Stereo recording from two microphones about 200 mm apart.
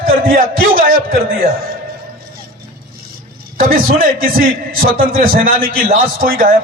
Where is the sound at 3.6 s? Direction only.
45° right (ahead or behind).